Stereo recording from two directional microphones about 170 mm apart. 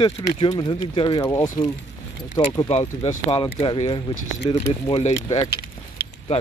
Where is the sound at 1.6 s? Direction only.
45° left (ahead or behind).